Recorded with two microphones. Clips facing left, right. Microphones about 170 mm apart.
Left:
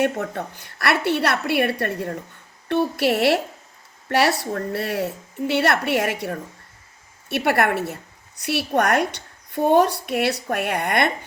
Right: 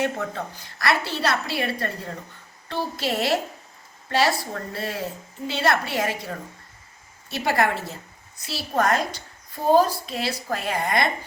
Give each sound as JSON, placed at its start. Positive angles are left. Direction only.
{"t": 0.0, "sound": "a woman's voice", "side_deg": 60}